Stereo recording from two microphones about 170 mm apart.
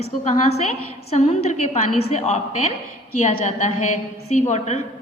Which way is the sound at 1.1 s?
40° left (ahead or behind).